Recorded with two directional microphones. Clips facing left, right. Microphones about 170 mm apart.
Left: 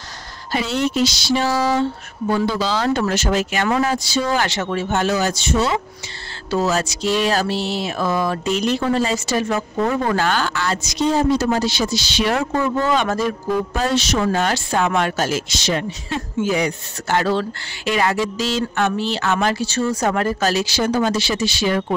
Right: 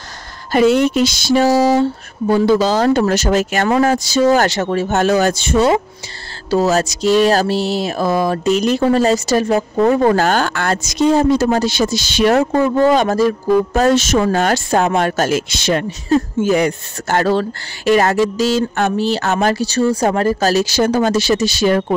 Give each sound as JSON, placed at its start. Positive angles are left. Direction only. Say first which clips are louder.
{"t": 0.5, "sound": "speech", "louder": "right 9 dB", "side_deg": -50}
{"t": 6.5, "sound": "speech", "louder": "right 5 dB", "side_deg": -40}
{"t": 16.1, "sound": "speech", "louder": "right 8 dB", "side_deg": -45}